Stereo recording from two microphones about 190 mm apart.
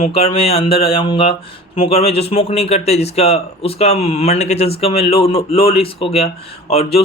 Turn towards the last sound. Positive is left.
turn(degrees=30)  # may be behind; listen again after turning